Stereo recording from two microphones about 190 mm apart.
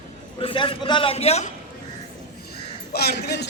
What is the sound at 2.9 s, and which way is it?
Speech, 55° left (ahead or behind).